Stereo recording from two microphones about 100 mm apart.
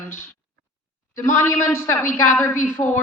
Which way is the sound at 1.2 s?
25° left (ahead or behind).